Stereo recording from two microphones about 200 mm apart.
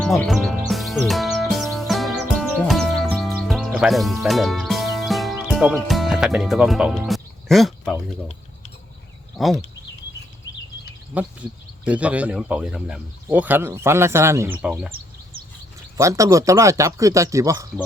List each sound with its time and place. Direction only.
0.0 s speech: centre (ahead or behind)
0.7 s music: centre (ahead or behind)
9.4 s speech: centre (ahead or behind)
11.9 s speech: 5° right (ahead or behind)
16.0 s speech: 15° right (ahead or behind)